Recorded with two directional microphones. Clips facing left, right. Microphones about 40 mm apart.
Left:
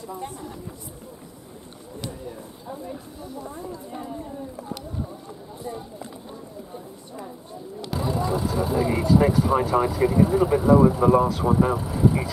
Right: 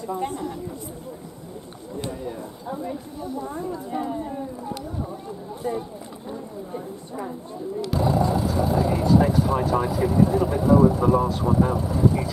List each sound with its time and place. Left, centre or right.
0.2 s speech: right
7.9 s speech: centre